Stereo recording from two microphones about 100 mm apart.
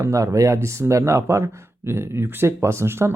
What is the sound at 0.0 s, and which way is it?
Speech, 30° right (ahead or behind).